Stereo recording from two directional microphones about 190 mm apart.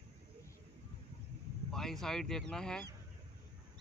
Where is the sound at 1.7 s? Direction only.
Centre (ahead or behind).